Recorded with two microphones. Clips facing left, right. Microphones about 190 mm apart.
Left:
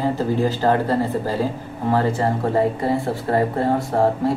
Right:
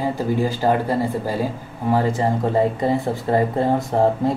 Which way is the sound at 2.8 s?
20° right (ahead or behind).